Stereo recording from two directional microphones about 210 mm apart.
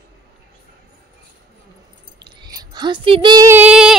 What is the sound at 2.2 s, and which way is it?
Female singing, 20° right (ahead or behind).